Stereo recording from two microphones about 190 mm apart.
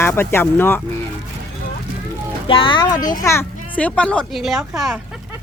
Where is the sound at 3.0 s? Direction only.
45° left (ahead or behind).